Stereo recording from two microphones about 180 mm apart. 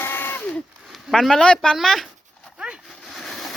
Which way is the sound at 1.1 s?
Centre (ahead or behind).